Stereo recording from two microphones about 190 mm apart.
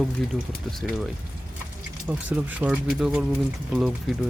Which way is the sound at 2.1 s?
10° right (ahead or behind).